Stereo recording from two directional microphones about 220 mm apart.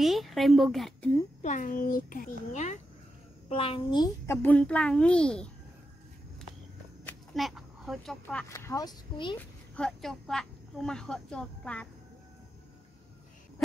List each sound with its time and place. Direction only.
0.0 s speech: centre (ahead or behind)
1.4 s a child's voice: 35° left (ahead or behind); by 5.5 s 5° left (ahead or behind)
7.1 s speech: centre (ahead or behind); by 9.4 s 20° left (ahead or behind)
9.8 s speech: centre (ahead or behind)